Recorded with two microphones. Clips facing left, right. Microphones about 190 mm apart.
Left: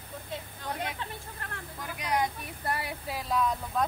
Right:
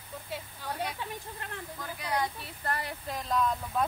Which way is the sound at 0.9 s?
20° right (ahead or behind).